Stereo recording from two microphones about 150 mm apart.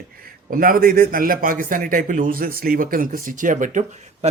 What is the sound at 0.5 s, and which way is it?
A man's voice, 70° right (ahead or behind).